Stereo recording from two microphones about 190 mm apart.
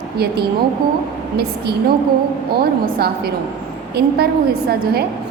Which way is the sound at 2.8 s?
55° right (ahead or behind).